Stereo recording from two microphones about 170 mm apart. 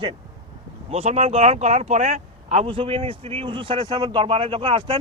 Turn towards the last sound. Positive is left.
turn(degrees=-30)  # may be behind; listen again after turning